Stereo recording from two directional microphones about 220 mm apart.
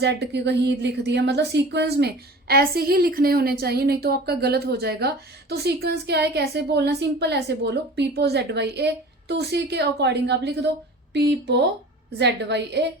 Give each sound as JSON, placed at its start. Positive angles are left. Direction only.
{"t": 0.0, "sound": "a woman's voice", "side_deg": -50}